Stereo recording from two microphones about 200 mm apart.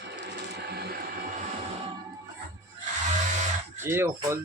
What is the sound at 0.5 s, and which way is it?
Printer, 55° right (ahead or behind).